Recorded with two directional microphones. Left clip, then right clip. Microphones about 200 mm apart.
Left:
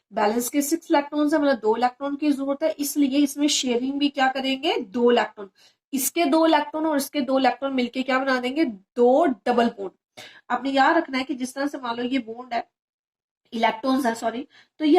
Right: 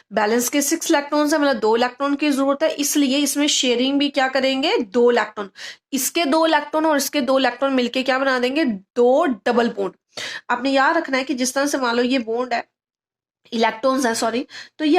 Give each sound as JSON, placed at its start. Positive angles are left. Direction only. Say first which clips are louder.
{"t": 0.1, "sound": "a woman's voice", "louder": "right 4 dB", "side_deg": -45}